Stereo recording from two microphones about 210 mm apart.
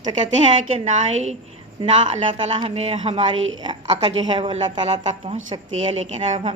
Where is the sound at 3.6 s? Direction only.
25° right (ahead or behind).